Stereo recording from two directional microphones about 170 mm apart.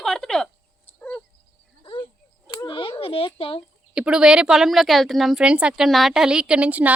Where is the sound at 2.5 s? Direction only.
30° left (ahead or behind).